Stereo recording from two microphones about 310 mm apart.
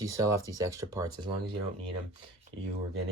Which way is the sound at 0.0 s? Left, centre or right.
Centre.